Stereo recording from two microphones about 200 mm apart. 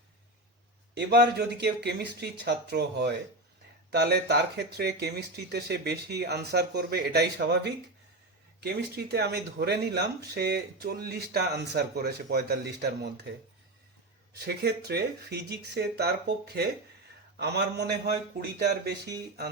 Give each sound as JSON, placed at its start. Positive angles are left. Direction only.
{"t": 0.9, "sound": "speech", "side_deg": -55}
{"t": 14.3, "sound": "speech", "side_deg": -55}